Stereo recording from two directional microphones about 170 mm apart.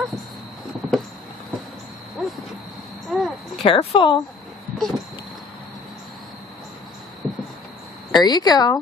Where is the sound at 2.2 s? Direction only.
Centre (ahead or behind).